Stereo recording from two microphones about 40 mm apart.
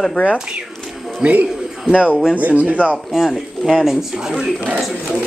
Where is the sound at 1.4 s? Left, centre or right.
Centre.